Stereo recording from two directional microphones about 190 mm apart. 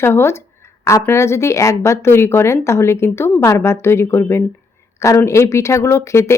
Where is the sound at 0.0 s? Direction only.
15° left (ahead or behind).